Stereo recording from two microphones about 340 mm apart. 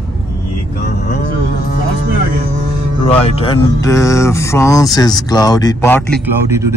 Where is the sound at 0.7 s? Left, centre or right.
Left.